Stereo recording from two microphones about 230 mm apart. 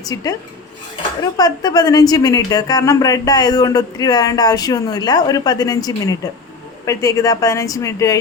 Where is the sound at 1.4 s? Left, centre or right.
Centre.